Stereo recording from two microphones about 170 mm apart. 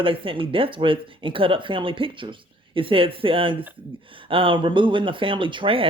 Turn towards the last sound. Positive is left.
turn(degrees=-30)  # may be behind; listen again after turning